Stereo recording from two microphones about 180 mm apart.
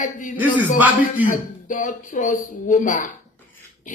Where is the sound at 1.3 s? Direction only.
45° left (ahead or behind).